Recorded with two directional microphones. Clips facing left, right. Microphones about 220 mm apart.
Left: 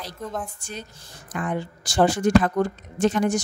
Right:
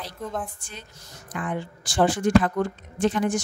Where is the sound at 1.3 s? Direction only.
40° left (ahead or behind).